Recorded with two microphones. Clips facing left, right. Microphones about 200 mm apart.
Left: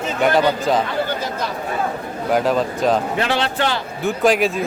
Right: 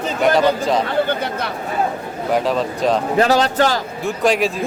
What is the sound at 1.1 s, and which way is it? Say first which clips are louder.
Speech: right 2 dB; 60° right (ahead or behind).